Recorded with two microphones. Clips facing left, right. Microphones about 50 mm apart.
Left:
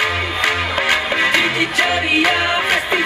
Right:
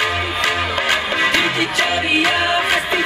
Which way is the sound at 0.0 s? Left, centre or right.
Centre.